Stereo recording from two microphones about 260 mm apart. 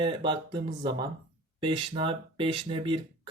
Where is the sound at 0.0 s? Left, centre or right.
Centre.